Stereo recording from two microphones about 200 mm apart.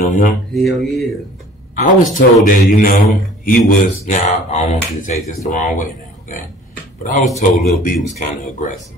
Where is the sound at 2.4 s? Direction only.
45° left (ahead or behind).